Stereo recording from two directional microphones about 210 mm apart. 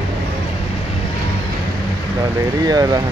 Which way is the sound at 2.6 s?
15° right (ahead or behind).